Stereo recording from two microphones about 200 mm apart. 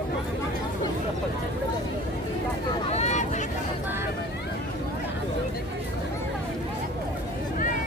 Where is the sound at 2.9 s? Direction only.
35° left (ahead or behind).